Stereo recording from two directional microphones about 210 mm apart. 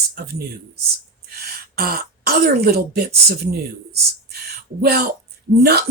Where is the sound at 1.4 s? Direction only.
45° right (ahead or behind).